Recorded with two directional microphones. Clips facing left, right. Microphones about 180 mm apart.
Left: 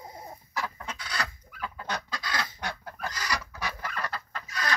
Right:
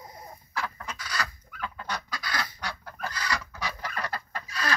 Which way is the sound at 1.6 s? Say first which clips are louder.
Even; 10° left (ahead or behind).